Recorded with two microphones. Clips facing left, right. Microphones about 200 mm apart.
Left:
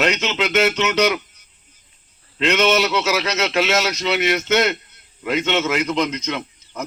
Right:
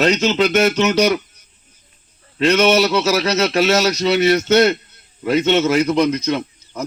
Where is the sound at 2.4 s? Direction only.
35° right (ahead or behind).